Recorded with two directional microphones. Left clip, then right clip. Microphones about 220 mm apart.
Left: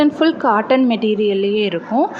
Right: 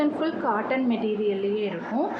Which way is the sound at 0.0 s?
40° left (ahead or behind).